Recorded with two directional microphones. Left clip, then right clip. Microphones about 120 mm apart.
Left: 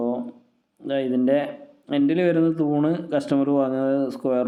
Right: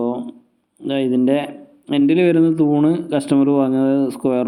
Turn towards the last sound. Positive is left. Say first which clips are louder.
# right 4 dB
turn(degrees=-20)  # may be behind; listen again after turning